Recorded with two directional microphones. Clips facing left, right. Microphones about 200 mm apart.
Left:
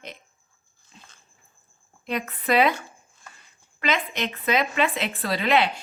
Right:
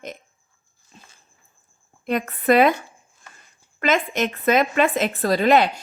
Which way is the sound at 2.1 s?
50° right (ahead or behind).